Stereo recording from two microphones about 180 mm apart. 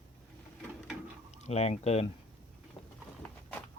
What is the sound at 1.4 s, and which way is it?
Speech, 35° left (ahead or behind).